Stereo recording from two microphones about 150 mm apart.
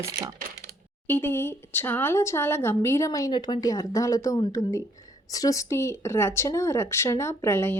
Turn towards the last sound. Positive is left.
turn(degrees=15)  # may be behind; listen again after turning